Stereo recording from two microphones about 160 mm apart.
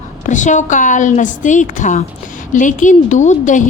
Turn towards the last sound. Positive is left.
turn(degrees=50)  # may be behind; listen again after turning